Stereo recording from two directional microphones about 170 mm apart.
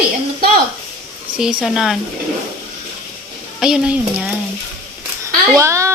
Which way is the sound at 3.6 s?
5° right (ahead or behind).